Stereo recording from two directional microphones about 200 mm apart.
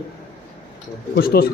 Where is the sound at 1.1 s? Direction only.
50° left (ahead or behind).